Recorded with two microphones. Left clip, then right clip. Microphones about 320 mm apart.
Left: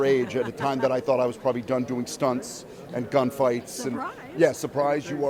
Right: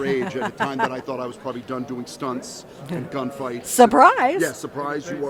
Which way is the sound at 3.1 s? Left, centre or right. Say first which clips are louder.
Left 7 dB; left.